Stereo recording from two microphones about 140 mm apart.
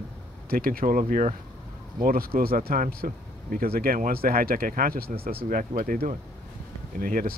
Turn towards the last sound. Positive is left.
turn(degrees=-90)